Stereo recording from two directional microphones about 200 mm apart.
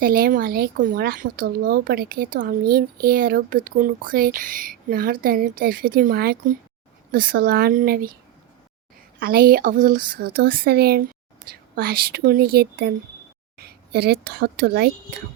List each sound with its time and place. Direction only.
0.0 s speech: 45° right (ahead or behind)
9.2 s a woman's voice: 50° right (ahead or behind)